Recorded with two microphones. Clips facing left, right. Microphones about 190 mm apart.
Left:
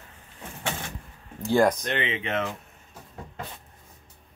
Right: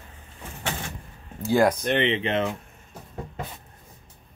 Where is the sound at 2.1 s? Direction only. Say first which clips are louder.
Right 4 dB; 30° right (ahead or behind).